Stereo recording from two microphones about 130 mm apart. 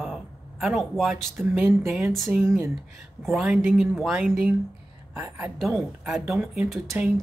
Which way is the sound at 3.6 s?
15° right (ahead or behind).